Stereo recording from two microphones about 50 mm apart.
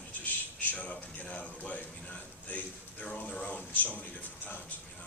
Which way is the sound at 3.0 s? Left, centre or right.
Left.